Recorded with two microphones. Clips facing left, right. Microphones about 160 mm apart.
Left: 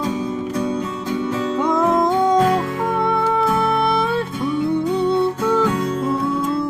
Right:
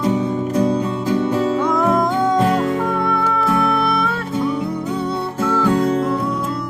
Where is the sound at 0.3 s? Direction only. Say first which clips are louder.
Right 4 dB; 30° right (ahead or behind).